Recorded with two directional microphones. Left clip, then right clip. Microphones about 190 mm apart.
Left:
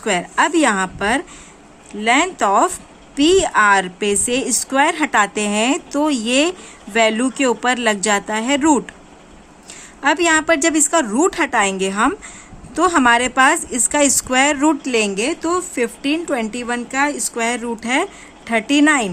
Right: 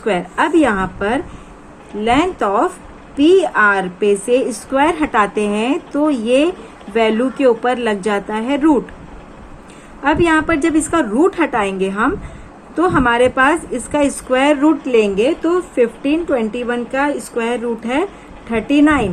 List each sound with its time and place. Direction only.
0.0 s a woman's voice: 75° left (ahead or behind)
10.0 s speech: 65° left (ahead or behind)